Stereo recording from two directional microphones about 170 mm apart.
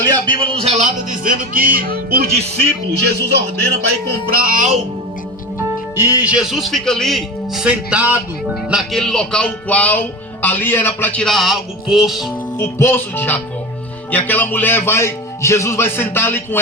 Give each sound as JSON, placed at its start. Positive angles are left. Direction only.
{"t": 0.0, "sound": "a man's voice", "side_deg": -25}
{"t": 1.2, "sound": "music", "side_deg": -50}
{"t": 3.0, "sound": "speech", "side_deg": -80}
{"t": 4.0, "sound": "music", "side_deg": -65}
{"t": 6.2, "sound": "a man's voice", "side_deg": -5}
{"t": 12.5, "sound": "speech", "side_deg": 15}